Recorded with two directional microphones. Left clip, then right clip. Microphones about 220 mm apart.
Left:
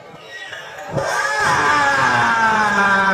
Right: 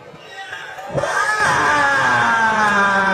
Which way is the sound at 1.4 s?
25° left (ahead or behind).